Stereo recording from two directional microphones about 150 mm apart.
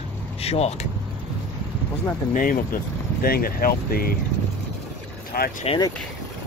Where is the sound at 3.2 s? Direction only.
80° left.